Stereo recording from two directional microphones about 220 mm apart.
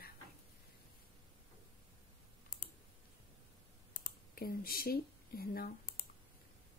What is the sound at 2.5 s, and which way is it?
Clicking, 40° left (ahead or behind).